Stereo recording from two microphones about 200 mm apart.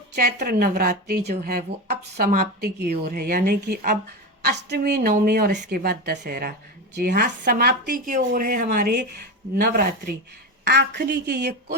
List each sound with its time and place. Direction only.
0.2 s a woman's voice: 50° right (ahead or behind)